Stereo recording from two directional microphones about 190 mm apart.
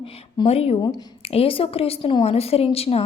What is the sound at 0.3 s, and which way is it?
A woman's voice, 30° left (ahead or behind).